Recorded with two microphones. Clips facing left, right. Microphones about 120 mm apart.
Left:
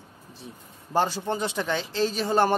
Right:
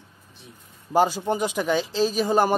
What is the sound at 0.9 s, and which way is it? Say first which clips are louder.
Speech: right 4 dB; 10° right (ahead or behind).